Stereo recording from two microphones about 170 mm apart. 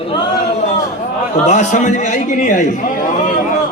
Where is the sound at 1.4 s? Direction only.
45° left (ahead or behind).